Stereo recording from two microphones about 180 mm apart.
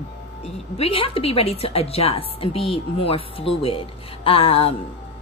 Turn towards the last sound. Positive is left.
turn(degrees=30)  # may be behind; listen again after turning